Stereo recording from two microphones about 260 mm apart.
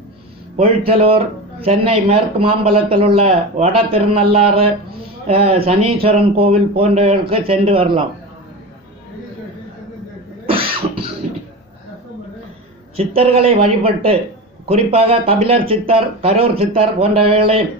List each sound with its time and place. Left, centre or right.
0.6 s a man's voice: right
10.5 s cough: right
12.9 s a man's voice: right